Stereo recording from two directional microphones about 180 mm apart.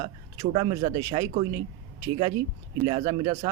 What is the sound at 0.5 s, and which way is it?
Speech, 30° right (ahead or behind).